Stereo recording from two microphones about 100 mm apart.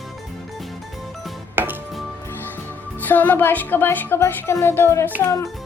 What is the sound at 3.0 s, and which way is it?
Speech, 20° left (ahead or behind).